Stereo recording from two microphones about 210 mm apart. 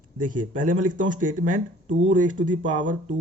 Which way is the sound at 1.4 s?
40° right (ahead or behind).